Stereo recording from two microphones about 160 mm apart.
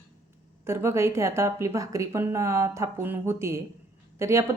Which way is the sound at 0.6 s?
15° right (ahead or behind).